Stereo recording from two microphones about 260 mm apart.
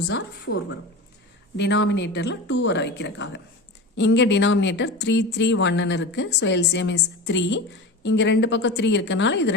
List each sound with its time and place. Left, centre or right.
0.1 s a woman's voice: left